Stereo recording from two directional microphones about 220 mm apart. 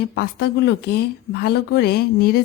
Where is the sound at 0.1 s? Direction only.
50° left (ahead or behind).